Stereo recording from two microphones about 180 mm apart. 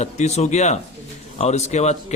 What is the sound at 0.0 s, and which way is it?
A man's voice, 40° left (ahead or behind).